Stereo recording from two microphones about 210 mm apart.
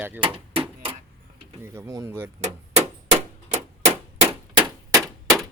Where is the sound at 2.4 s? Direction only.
30° right (ahead or behind).